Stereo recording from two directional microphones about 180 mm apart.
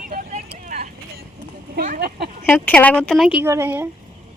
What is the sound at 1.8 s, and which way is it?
Speech, 50° right (ahead or behind).